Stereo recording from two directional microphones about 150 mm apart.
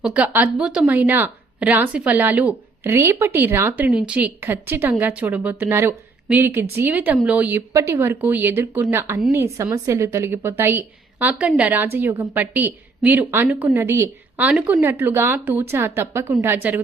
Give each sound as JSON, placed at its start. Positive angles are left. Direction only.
{"t": 0.0, "sound": "a woman's voice", "side_deg": -10}